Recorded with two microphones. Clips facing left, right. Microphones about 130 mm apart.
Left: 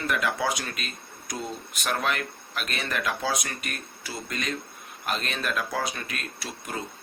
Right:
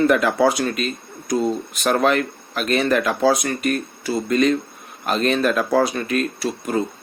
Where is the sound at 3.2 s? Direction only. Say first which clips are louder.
Right 12 dB; 55° right (ahead or behind).